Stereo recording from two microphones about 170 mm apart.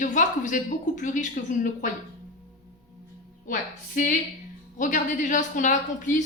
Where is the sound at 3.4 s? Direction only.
50° left (ahead or behind).